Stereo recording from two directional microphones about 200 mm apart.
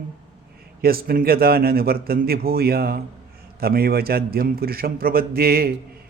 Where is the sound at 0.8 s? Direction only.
50° right (ahead or behind).